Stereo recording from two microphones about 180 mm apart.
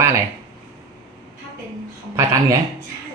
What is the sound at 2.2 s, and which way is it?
Speech, 15° right (ahead or behind).